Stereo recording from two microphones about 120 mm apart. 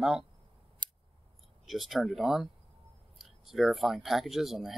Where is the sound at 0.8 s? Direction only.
35° right (ahead or behind).